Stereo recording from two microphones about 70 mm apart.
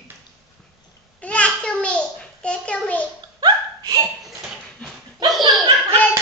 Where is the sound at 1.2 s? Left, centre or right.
Centre.